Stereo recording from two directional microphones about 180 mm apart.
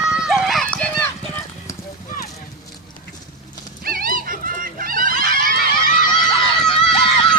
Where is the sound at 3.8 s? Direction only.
55° right (ahead or behind).